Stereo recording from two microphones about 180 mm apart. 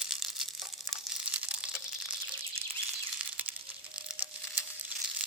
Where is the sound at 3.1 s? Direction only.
10° right (ahead or behind).